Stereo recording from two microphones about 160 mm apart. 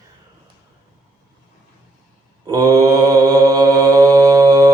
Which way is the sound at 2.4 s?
20° right (ahead or behind).